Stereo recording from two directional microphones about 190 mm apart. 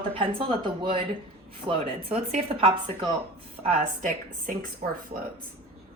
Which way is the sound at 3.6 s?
45° right (ahead or behind).